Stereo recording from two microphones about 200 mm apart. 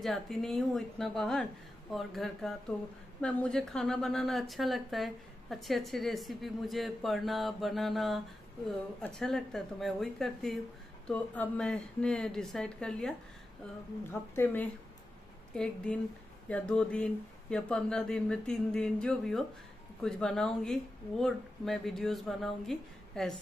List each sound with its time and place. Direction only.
0.0 s a woman's voice: centre (ahead or behind)
14.3 s a woman's voice: 10° left (ahead or behind)